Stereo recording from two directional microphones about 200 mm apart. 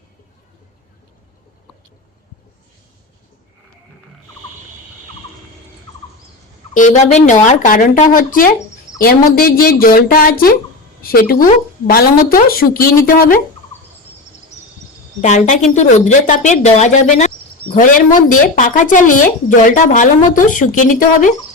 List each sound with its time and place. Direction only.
6.7 s speech: 40° left (ahead or behind)
15.2 s speech: 35° left (ahead or behind)